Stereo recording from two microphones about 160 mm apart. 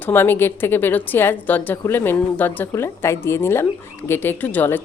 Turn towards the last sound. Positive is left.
turn(degrees=10)  # may be behind; listen again after turning